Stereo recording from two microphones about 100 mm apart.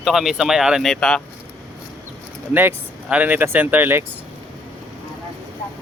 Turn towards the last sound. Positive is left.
turn(degrees=-20)  # may be behind; listen again after turning